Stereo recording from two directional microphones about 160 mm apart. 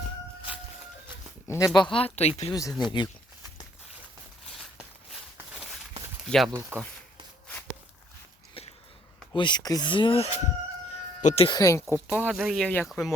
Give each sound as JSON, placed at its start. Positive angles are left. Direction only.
{"t": 1.5, "sound": "speech", "side_deg": 20}
{"t": 2.5, "sound": "speech", "side_deg": 25}
{"t": 6.5, "sound": "speech", "side_deg": -15}
{"t": 9.3, "sound": "speech", "side_deg": 30}
{"t": 10.9, "sound": "chicken", "side_deg": 45}
{"t": 11.4, "sound": "speech", "side_deg": 25}
{"t": 12.0, "sound": "speech", "side_deg": -10}